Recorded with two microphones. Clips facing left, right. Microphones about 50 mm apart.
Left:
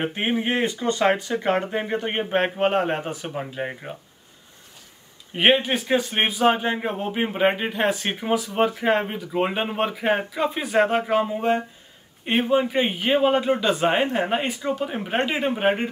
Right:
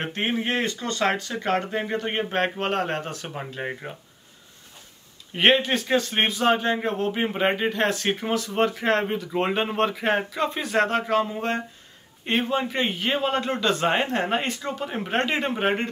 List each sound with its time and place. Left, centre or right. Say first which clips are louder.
0.0 s speech: left 2 dB; centre
3.3 s speech: left 2 dB; centre
5.3 s speech: left 1 dB; centre